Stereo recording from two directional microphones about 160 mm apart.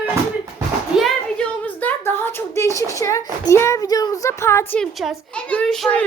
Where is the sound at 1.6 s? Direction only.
10° left (ahead or behind).